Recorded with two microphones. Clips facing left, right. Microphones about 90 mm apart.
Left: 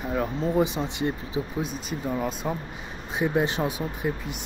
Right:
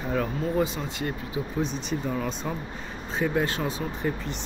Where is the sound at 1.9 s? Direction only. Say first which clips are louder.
Even; 10° left (ahead or behind).